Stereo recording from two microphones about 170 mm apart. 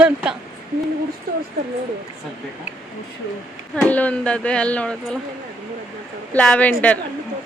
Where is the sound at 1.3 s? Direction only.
55° right (ahead or behind).